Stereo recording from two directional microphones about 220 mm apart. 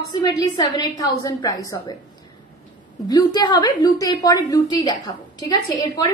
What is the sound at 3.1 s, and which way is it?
A woman's voice, 20° left (ahead or behind).